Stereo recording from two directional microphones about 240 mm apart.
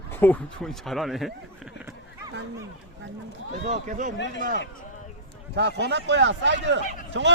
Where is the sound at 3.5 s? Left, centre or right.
Right.